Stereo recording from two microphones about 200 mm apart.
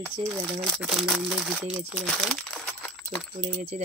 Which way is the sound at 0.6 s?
5° right (ahead or behind).